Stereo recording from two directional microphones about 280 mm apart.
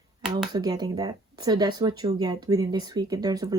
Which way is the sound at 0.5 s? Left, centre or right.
Centre.